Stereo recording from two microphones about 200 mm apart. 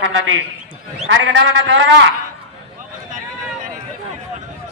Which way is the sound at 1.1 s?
65° right (ahead or behind).